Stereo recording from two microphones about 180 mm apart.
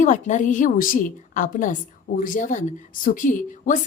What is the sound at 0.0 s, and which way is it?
A woman's voice, 45° left (ahead or behind).